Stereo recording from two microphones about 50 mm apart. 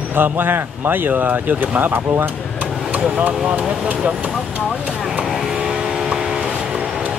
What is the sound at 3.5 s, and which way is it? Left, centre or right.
Speech, right.